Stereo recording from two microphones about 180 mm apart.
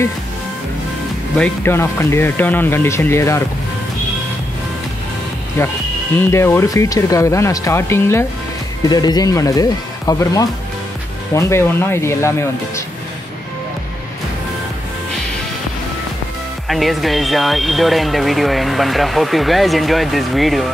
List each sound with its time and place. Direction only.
1.4 s speech: 15° left (ahead or behind)
5.6 s speech: 15° left (ahead or behind)
16.6 s speech: centre (ahead or behind)